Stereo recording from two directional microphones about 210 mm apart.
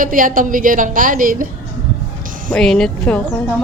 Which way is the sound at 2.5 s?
Centre (ahead or behind).